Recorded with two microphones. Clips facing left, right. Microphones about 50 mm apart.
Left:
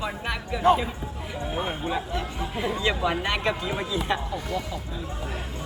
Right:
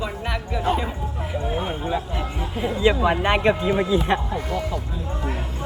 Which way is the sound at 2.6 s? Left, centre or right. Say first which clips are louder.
Right 6 dB; right.